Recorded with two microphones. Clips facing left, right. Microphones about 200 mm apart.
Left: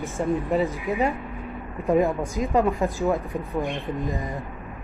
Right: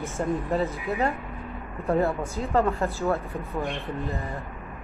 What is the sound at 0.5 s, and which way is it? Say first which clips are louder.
A woman's voice: left 3 dB; 15° left (ahead or behind).